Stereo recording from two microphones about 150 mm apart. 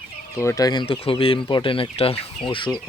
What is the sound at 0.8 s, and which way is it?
Speech, 40° left (ahead or behind).